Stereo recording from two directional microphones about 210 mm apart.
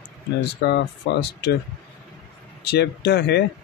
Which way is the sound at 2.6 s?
50° left (ahead or behind).